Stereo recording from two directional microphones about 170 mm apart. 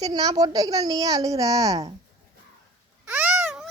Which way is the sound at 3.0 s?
10° right (ahead or behind).